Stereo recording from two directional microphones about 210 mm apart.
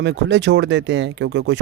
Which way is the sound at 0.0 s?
55° right (ahead or behind).